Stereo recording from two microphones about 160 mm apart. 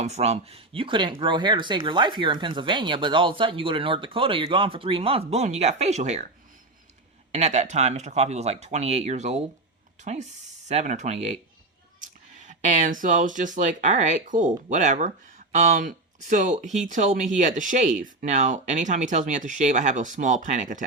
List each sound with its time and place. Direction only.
0.0 s speech: 45° right (ahead or behind)
7.3 s speech: 45° right (ahead or behind)